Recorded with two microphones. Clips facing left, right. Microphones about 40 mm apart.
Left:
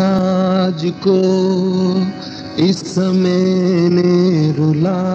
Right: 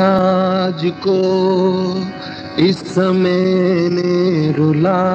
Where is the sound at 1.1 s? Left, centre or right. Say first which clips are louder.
Left 2 dB; centre.